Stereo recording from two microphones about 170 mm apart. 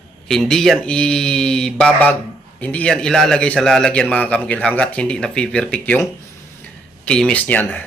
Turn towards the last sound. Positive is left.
turn(degrees=10)  # may be behind; listen again after turning